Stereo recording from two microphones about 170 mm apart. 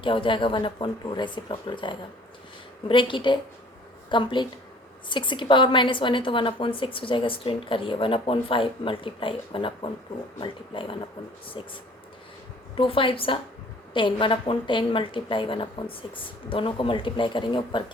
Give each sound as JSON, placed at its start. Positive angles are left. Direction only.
{"t": 0.0, "sound": "a woman's voice", "side_deg": 30}
{"t": 12.7, "sound": "a woman's voice", "side_deg": 30}